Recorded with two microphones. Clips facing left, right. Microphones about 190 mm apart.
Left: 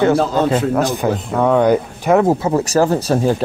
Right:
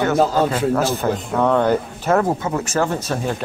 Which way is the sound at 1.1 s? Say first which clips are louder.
Left 2 dB; 5° left (ahead or behind).